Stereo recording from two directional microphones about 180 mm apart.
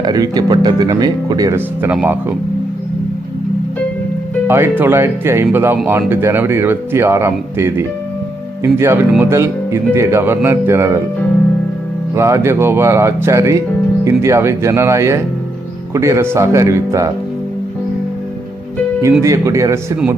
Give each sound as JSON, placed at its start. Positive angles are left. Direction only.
{"t": 0.0, "sound": "speech", "side_deg": -20}
{"t": 4.4, "sound": "speech", "side_deg": -15}
{"t": 12.1, "sound": "speech", "side_deg": -15}
{"t": 19.2, "sound": "speech", "side_deg": -15}